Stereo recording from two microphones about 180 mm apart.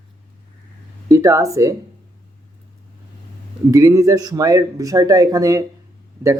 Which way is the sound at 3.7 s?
15° right (ahead or behind).